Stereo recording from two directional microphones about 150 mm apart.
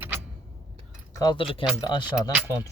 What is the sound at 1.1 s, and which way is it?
Speech, 25° left (ahead or behind).